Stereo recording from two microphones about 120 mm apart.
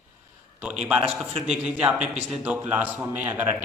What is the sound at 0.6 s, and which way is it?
A man's voice, 5° right (ahead or behind).